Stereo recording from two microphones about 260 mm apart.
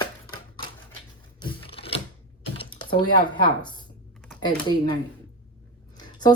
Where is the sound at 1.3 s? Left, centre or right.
Centre.